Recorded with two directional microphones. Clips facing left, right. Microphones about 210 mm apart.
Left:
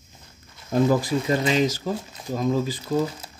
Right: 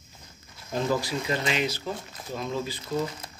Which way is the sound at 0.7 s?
50° left (ahead or behind).